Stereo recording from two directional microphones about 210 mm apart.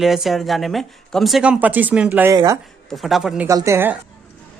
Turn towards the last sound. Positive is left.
turn(degrees=-10)  # may be behind; listen again after turning